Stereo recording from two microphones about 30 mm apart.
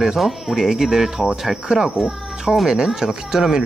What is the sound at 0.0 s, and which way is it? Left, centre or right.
Speech, centre.